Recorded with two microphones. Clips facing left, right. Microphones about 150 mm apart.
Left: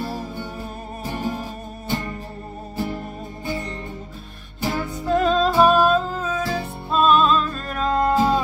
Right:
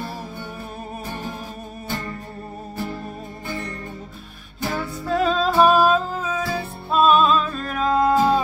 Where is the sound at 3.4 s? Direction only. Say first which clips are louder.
Left 3 dB; 20° left (ahead or behind).